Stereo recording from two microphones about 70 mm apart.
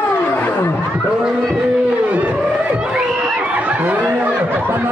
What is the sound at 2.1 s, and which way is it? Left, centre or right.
Whale vocalization, centre.